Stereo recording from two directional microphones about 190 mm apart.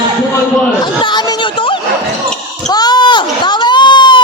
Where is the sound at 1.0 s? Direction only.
20° left (ahead or behind).